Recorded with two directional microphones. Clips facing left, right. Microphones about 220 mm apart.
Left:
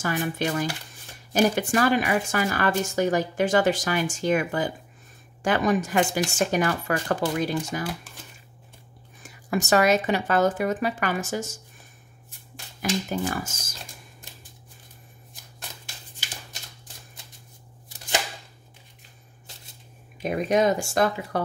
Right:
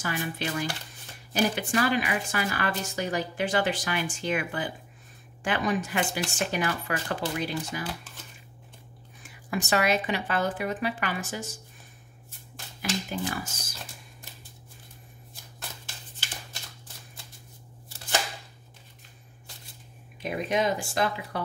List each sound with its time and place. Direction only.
0.0 s speech: 45° left (ahead or behind)
9.2 s speech: 45° left (ahead or behind)
13.1 s speech: 45° left (ahead or behind)
20.2 s speech: 45° left (ahead or behind)